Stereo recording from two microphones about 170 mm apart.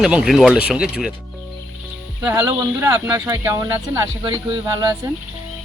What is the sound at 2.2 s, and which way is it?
Speech, 15° right (ahead or behind).